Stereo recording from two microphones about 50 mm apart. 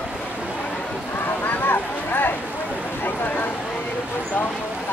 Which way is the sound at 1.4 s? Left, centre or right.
Left.